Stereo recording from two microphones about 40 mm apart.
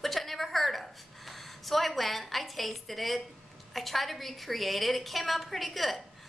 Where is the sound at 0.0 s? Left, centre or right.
Centre.